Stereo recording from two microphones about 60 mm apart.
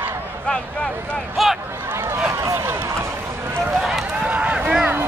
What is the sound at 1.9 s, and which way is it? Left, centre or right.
Run, right.